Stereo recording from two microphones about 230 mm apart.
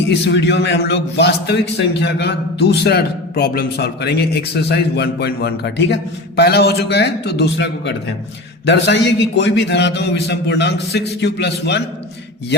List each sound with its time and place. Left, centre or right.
0.1 s a man's voice: left